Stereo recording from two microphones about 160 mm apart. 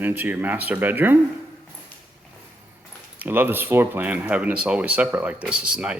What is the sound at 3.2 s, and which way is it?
Speech, 10° right (ahead or behind).